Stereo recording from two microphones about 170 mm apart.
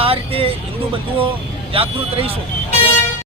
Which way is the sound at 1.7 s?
35° right (ahead or behind).